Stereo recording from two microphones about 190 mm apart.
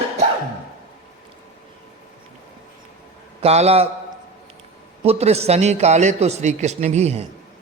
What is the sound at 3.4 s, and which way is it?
Speech, 35° right (ahead or behind).